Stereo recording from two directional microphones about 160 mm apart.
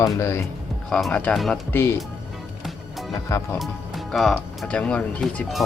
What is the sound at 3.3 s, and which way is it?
Speech, 20° left (ahead or behind).